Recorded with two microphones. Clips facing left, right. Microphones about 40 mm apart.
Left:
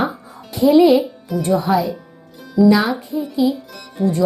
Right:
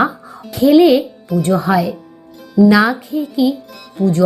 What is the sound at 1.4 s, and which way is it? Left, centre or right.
Speech, right.